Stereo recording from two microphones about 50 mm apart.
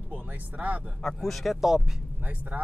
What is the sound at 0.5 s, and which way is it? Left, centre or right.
Speech, right.